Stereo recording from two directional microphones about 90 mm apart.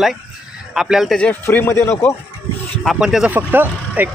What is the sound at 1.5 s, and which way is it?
Speech, 30° left (ahead or behind).